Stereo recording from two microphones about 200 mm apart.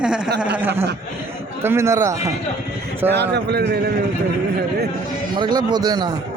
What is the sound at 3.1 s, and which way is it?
Speech, 55° right (ahead or behind).